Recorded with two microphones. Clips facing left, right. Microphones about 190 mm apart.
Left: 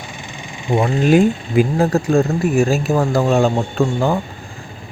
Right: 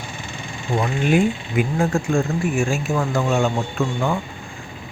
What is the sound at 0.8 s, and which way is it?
Speech, 40° left (ahead or behind).